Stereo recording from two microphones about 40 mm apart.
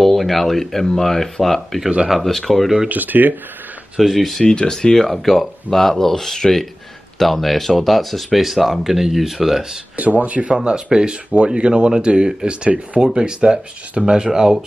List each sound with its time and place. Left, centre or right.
0.0 s speech: centre
2.9 s speech: right
4.0 s speech: centre
4.4 s speech: centre
4.9 s speech: centre
9.9 s speech: right
10.6 s speech: right